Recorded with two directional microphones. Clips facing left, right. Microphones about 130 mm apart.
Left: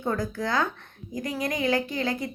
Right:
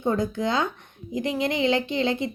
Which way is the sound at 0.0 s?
20° right (ahead or behind).